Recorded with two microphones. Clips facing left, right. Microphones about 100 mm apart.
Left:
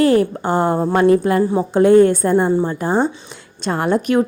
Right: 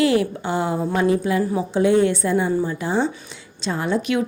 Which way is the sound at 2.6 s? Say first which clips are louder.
Left 4 dB; 50° left (ahead or behind).